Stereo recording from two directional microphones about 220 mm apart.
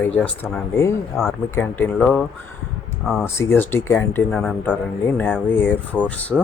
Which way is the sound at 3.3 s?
10° left (ahead or behind).